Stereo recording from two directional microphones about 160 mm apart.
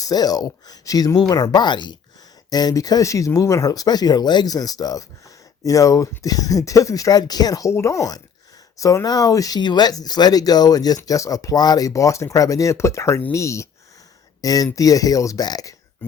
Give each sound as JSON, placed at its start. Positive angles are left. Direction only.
{"t": 0.0, "sound": "speech", "side_deg": 25}